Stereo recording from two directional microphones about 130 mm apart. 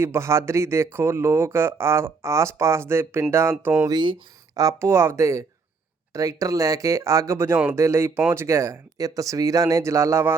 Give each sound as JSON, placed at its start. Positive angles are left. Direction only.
{"t": 0.0, "sound": "speech", "side_deg": -20}
{"t": 3.8, "sound": "speech", "side_deg": -35}
{"t": 4.6, "sound": "speech", "side_deg": -20}